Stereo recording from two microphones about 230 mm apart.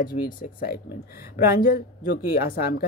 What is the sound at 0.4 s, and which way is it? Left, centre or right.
A woman's voice, left.